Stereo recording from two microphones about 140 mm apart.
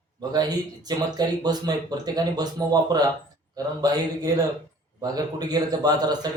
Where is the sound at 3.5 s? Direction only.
30° right (ahead or behind).